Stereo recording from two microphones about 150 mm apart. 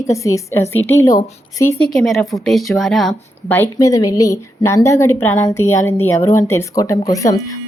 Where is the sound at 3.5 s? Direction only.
20° left (ahead or behind).